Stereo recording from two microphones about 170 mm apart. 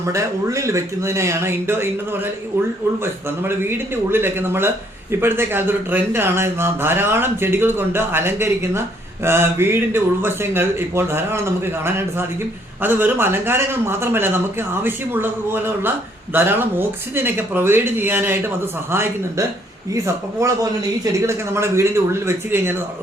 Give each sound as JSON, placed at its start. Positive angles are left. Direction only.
{"t": 0.0, "sound": "speech", "side_deg": -15}
{"t": 3.0, "sound": "speech", "side_deg": -15}